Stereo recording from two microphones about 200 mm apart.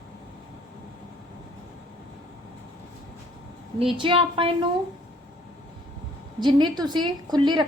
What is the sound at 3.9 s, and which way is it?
Speech, 25° right (ahead or behind).